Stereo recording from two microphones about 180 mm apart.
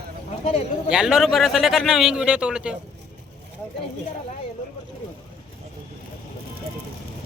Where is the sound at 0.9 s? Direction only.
5° right (ahead or behind).